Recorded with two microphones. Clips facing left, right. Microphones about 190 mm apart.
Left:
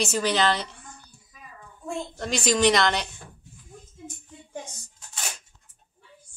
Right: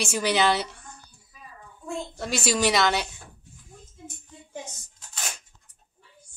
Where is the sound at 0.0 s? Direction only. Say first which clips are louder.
Even; 10° right (ahead or behind).